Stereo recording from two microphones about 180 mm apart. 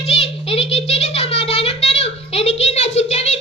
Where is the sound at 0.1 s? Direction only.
35° left (ahead or behind).